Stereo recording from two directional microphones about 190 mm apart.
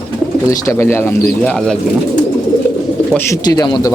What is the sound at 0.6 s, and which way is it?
Speech, 15° left (ahead or behind).